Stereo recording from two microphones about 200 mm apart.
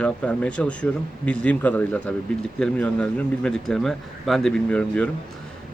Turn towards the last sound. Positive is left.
turn(degrees=5)  # may be behind; listen again after turning